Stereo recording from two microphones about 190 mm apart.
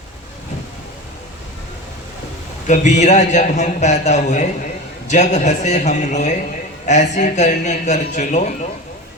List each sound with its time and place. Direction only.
2.6 s a man's voice: 40° left (ahead or behind)